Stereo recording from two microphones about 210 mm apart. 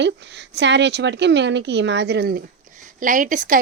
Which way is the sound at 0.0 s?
55° right (ahead or behind).